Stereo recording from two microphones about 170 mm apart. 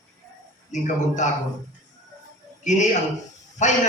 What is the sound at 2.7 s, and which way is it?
A man's voice, 45° left (ahead or behind).